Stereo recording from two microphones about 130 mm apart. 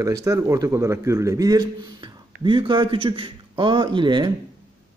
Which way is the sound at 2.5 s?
40° right (ahead or behind).